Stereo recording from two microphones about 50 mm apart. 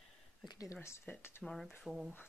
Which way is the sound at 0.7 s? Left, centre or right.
Left.